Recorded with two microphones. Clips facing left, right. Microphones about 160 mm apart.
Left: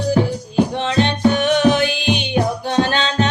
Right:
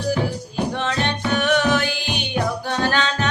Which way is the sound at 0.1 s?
20° left (ahead or behind).